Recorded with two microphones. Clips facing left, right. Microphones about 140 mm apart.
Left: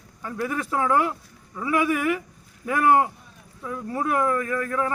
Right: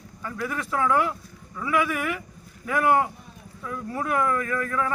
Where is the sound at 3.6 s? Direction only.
25° left (ahead or behind).